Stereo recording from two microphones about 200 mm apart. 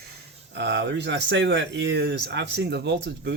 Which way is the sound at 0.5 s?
65° right (ahead or behind).